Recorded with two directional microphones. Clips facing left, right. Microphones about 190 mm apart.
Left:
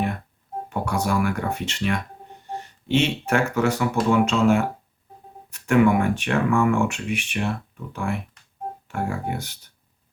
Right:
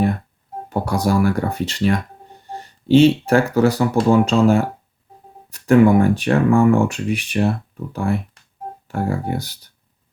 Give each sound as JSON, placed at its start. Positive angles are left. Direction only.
{"t": 0.7, "sound": "speech", "side_deg": -35}